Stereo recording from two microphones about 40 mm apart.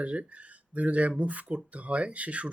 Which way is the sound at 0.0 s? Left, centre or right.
Right.